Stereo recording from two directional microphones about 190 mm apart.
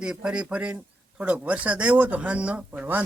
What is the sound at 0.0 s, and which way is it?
Speech, 5° right (ahead or behind).